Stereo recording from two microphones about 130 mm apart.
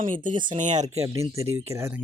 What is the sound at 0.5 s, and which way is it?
Speech, 70° right (ahead or behind).